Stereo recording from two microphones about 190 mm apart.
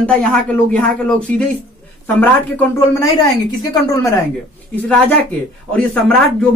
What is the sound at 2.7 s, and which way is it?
Speech, 20° left (ahead or behind).